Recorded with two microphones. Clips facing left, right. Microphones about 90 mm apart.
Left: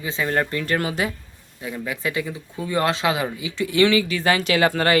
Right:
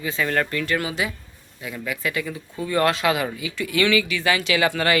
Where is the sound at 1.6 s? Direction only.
25° left (ahead or behind).